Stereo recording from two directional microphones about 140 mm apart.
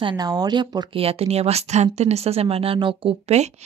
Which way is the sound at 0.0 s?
30° right (ahead or behind).